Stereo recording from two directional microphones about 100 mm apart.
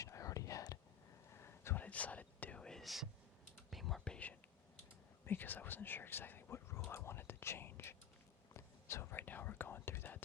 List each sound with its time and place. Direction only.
0.0 s whispering: 35° left (ahead or behind)